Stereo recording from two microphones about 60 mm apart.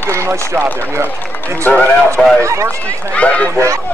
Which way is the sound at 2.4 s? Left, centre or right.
Right.